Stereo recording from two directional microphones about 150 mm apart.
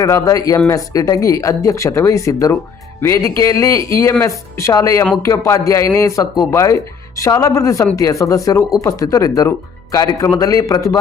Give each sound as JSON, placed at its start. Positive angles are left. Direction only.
{"t": 0.0, "sound": "speech", "side_deg": 20}